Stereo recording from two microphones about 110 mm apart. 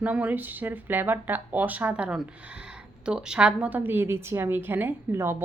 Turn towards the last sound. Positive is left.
turn(degrees=-20)  # may be behind; listen again after turning